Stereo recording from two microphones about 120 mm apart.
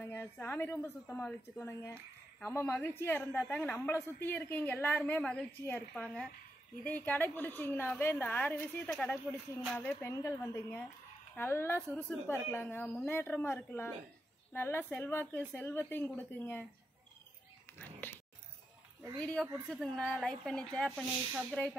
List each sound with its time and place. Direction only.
0.0 s a woman's voice: 20° left (ahead or behind)
19.1 s a woman's voice: 10° left (ahead or behind)